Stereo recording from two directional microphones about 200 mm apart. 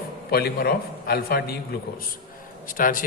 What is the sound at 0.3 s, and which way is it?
A man's voice, 50° left (ahead or behind).